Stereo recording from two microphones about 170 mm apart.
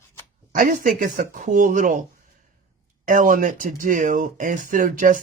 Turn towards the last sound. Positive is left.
turn(degrees=-50)  # may be behind; listen again after turning